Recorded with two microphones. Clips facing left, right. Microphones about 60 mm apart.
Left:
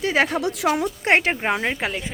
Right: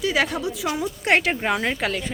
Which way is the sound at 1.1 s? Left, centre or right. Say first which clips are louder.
Left 1 dB; left.